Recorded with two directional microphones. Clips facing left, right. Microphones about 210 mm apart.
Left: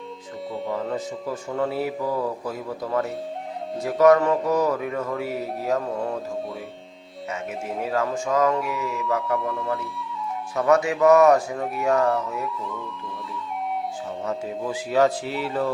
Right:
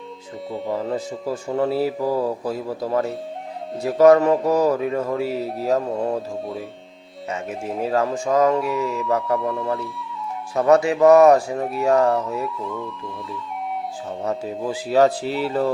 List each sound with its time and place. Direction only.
0.7 s speech: 30° right (ahead or behind)
10.5 s speech: 30° right (ahead or behind)
12.5 s speech: centre (ahead or behind)
14.3 s speech: 30° right (ahead or behind)